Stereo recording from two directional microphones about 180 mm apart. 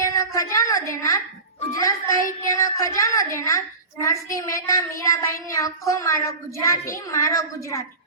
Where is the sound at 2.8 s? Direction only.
15° left (ahead or behind).